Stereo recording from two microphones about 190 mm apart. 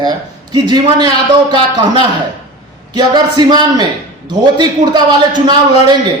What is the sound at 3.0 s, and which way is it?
A man's voice, 20° right (ahead or behind).